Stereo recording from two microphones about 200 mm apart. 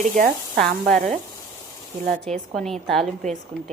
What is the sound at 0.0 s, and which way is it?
A woman's voice, 40° right (ahead or behind).